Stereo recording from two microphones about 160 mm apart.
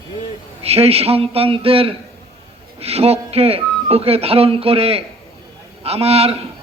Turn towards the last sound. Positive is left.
turn(degrees=-40)  # may be behind; listen again after turning